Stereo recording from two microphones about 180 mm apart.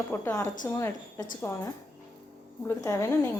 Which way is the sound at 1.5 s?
15° left (ahead or behind).